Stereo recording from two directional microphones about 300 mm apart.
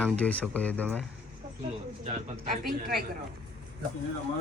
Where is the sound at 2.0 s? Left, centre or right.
Right.